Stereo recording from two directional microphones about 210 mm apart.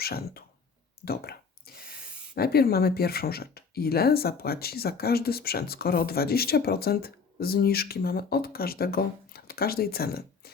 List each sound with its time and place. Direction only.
0.0 s speech: 45° left (ahead or behind)
1.0 s a sound: 45° left (ahead or behind)
2.3 s speech: 45° left (ahead or behind)